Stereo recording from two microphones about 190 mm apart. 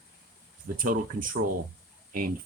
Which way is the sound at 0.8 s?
45° right (ahead or behind).